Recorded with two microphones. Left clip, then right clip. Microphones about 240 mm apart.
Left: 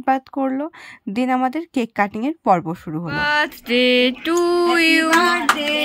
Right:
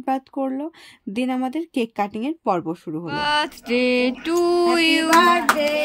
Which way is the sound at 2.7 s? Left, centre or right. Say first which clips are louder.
Left 1 dB; left.